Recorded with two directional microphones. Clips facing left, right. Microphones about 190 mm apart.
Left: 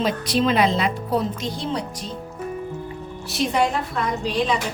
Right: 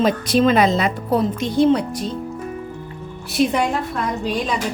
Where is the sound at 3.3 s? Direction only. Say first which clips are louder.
Right 6 dB; 55° right (ahead or behind).